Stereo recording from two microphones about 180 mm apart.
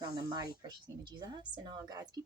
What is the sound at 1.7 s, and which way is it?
Speech, 20° right (ahead or behind).